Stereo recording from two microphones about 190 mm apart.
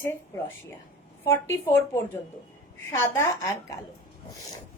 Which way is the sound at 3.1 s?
15° left (ahead or behind).